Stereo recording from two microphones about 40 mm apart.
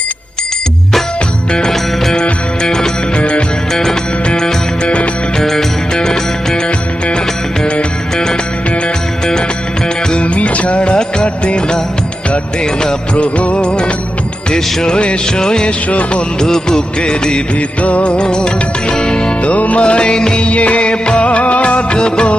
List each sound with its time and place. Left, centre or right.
2.6 s music: centre
4.3 s music: centre
7.6 s music: centre
10.1 s music of bollywood: left
12.8 s music of bollywood: left
15.9 s music of bollywood: left
16.4 s music of bollywood: centre
17.8 s music: left
19.4 s music of bollywood: left